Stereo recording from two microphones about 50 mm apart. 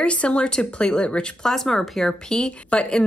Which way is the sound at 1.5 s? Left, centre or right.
Centre.